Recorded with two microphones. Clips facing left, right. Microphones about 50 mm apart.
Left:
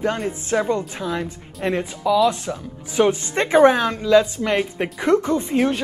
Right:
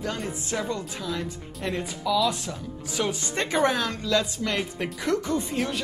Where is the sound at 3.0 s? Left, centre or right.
Left.